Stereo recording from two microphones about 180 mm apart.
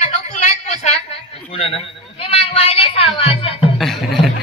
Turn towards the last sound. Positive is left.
turn(degrees=0)  # may be behind; listen again after turning